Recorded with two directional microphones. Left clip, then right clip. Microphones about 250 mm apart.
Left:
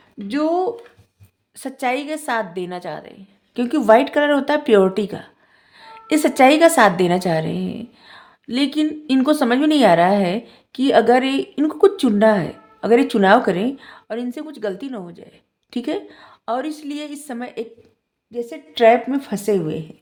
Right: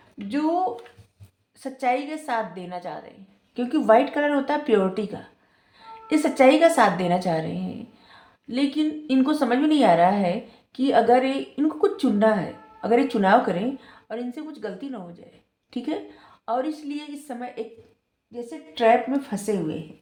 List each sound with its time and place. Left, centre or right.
0.3 s a woman's voice: left